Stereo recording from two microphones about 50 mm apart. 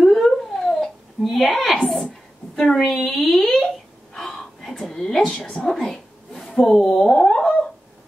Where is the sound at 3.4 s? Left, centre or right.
Left.